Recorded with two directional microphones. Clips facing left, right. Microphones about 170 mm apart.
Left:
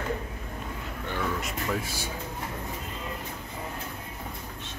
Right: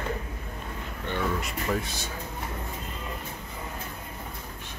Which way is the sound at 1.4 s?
5° left (ahead or behind).